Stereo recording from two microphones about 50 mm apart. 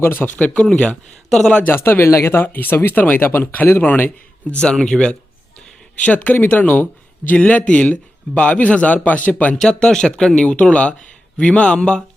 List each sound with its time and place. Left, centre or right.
0.0 s speech: left
0.3 s a man's voice: left
0.6 s speech: centre
1.7 s speech: left
2.5 s speech: left
4.4 s a man's voice: left
6.0 s a man's voice: left
9.6 s a man's voice: centre